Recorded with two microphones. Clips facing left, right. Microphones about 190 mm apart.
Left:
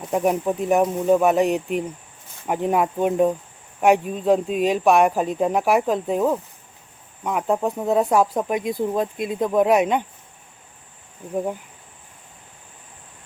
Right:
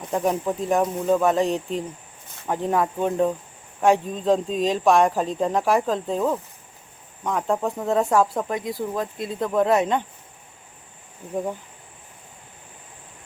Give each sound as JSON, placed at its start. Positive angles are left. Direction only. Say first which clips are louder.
{"t": 0.1, "sound": "speech", "louder": "left 2 dB", "side_deg": 10}